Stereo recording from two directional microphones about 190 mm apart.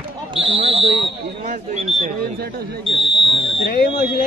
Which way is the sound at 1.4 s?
35° right (ahead or behind).